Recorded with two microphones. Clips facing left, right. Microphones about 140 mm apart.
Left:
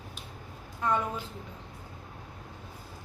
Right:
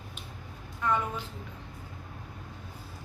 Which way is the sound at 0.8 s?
30° left (ahead or behind).